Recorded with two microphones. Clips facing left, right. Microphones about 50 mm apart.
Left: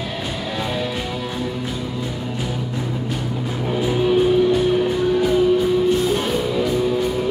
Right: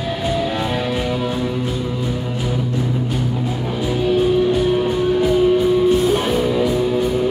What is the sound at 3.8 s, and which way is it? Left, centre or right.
Music, centre.